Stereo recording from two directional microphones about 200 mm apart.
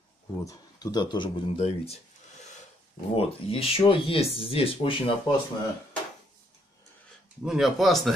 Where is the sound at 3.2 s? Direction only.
30° left (ahead or behind).